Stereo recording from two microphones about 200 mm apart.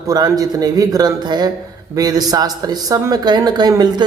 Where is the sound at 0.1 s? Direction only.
20° right (ahead or behind).